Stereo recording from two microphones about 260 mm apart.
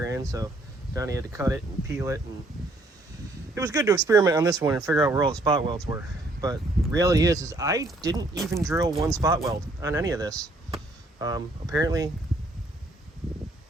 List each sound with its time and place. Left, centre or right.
0.0 s a sound: centre
0.9 s speech: centre
3.5 s speech: centre